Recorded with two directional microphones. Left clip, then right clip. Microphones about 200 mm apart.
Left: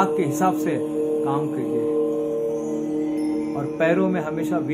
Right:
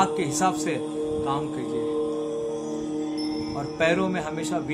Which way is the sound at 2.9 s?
50° right (ahead or behind).